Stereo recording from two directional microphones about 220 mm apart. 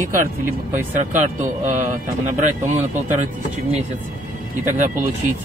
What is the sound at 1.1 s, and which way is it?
Speech, 35° right (ahead or behind).